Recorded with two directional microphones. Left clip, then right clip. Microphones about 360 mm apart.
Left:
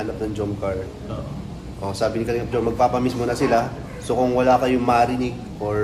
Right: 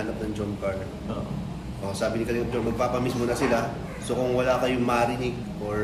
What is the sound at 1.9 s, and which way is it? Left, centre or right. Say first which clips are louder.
A man's voice: left 5 dB; centre.